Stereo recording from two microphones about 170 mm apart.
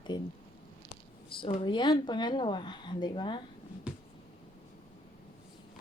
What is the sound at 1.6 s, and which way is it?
Speech, 25° left (ahead or behind).